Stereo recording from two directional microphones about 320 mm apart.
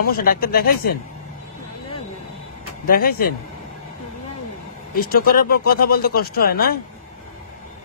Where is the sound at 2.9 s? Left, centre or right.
Left.